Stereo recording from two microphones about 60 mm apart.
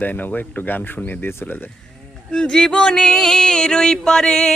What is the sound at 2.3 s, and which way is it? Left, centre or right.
Music, centre.